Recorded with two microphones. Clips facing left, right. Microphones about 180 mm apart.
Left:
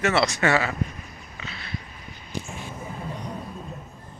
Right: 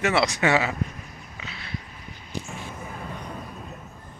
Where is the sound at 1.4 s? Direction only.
10° right (ahead or behind).